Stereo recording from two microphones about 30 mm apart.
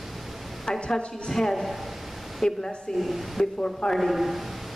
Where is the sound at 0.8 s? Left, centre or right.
Left.